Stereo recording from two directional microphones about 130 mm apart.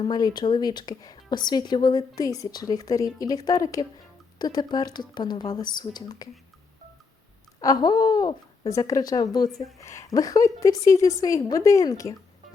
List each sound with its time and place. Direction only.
0.0 s a woman's voice: 30° left (ahead or behind)
7.6 s a woman's voice: 30° left (ahead or behind)